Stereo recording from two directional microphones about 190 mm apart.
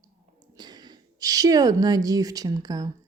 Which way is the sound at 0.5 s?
20° right (ahead or behind).